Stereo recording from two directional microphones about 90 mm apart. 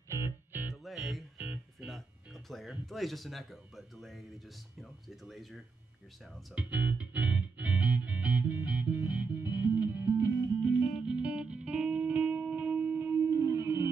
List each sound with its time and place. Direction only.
0.1 s music: 25° right (ahead or behind)
0.8 s music: centre (ahead or behind)
1.4 s music: 15° right (ahead or behind)
1.9 s music: centre (ahead or behind)
5.0 s speech: centre (ahead or behind)
6.5 s music: 15° right (ahead or behind)